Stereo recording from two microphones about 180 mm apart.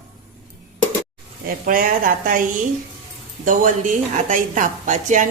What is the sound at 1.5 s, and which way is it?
A woman's voice, 50° right (ahead or behind).